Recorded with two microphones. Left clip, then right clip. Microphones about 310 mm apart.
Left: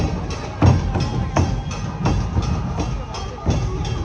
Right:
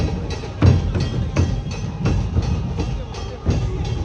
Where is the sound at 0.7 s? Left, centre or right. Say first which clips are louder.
Left 1 dB; centre.